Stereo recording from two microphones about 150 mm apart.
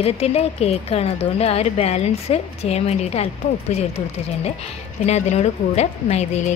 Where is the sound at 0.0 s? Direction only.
45° left (ahead or behind).